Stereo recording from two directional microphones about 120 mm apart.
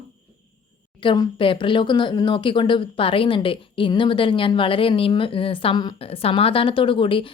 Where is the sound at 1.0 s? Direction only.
45° left (ahead or behind).